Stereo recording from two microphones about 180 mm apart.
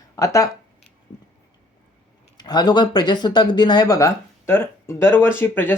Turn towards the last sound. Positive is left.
turn(degrees=10)  # may be behind; listen again after turning